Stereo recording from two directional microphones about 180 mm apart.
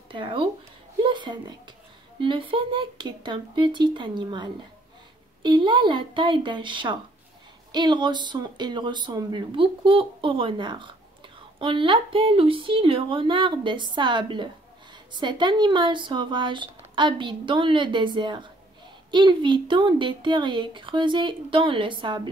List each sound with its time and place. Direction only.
0.1 s speech: 30° right (ahead or behind)
1.0 s a sound: 25° right (ahead or behind)
2.1 s speech: 25° right (ahead or behind)